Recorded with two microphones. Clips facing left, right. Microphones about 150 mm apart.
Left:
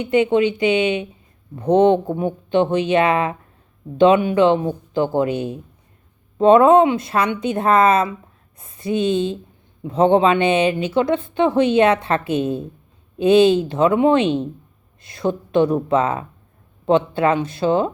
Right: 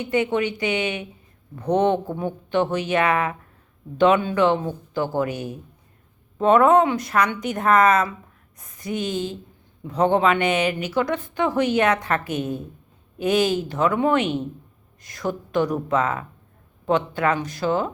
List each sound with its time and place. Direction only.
0.0 s speech: 25° left (ahead or behind)